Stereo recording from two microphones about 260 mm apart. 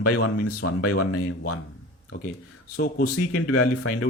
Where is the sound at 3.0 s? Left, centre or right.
Left.